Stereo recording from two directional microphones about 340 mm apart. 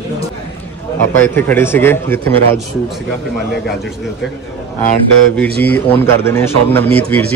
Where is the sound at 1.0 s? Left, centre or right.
Centre.